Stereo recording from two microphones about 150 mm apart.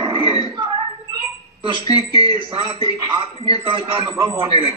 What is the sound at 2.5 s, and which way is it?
A man's voice, 35° right (ahead or behind).